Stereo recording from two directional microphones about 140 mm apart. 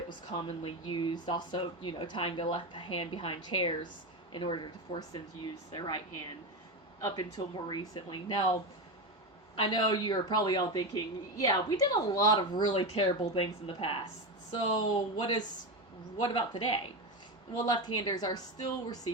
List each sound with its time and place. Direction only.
0.3 s speech: 40° left (ahead or behind)
9.6 s a woman's voice: 35° left (ahead or behind)